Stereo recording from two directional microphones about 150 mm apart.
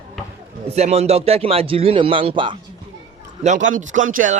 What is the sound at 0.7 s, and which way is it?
A man's voice, 45° right (ahead or behind).